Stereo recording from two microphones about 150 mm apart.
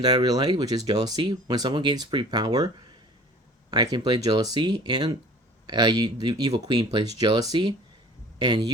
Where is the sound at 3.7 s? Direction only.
25° right (ahead or behind).